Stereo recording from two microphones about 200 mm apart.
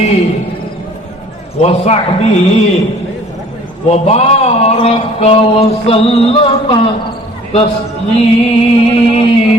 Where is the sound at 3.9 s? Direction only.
30° left (ahead or behind).